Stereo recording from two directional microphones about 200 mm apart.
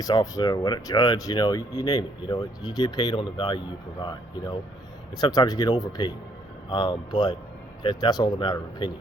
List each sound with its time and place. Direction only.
0.0 s speech: 20° left (ahead or behind)
5.1 s speech: 20° left (ahead or behind)